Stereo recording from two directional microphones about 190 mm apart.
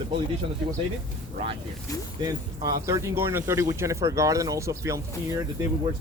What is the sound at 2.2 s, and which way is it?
Speech, 20° right (ahead or behind).